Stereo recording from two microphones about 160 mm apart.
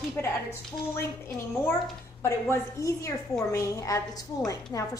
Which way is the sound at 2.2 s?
15° left (ahead or behind).